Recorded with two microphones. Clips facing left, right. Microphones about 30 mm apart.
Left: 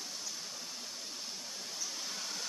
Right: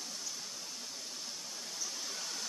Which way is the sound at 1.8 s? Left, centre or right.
Centre.